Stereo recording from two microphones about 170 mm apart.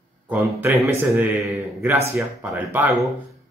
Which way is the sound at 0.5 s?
15° right (ahead or behind).